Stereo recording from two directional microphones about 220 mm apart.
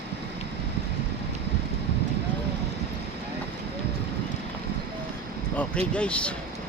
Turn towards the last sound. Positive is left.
turn(degrees=5)  # may be behind; listen again after turning